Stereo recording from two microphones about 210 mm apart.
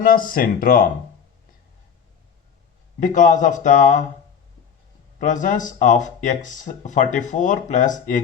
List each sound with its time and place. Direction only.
0.0 s speech: 45° left (ahead or behind)
3.0 s speech: 35° left (ahead or behind)
5.2 s speech: 35° left (ahead or behind)